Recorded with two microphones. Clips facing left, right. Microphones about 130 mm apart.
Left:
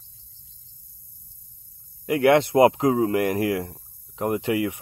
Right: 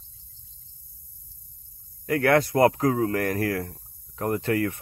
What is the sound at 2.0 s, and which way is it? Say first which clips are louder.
Speech: left 3 dB; 20° left (ahead or behind).